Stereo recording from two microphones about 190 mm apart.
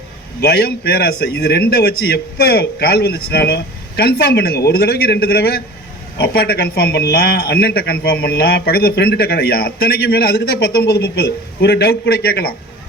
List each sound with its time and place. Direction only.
0.4 s a man's voice: 60° left (ahead or behind)